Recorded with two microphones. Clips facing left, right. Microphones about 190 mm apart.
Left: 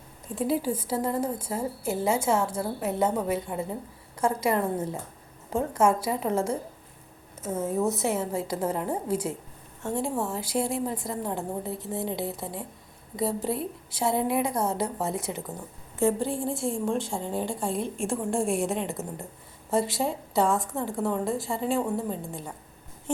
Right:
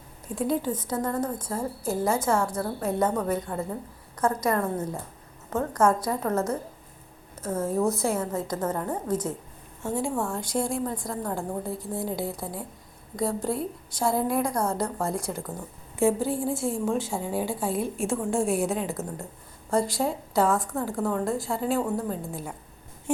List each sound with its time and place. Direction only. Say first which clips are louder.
0.3 s a woman's voice: even; 5° left (ahead or behind)
4.2 s a woman's voice: even; 30° left (ahead or behind)
5.5 s a woman's voice: even; 10° left (ahead or behind)
6.2 s a woman's voice: even; 30° left (ahead or behind)
7.6 s a woman's voice: right 1 dB; centre (ahead or behind)
14.4 s a woman's voice: even; 25° left (ahead or behind)
14.8 s a woman's voice: right 1 dB; 5° left (ahead or behind)
23.1 s a sound: right 3 dB; 10° right (ahead or behind)